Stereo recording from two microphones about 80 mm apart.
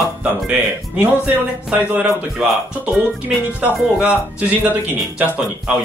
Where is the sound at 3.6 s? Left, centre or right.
Centre.